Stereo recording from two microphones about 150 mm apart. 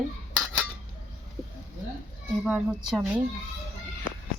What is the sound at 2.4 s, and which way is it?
Speech, 5° right (ahead or behind).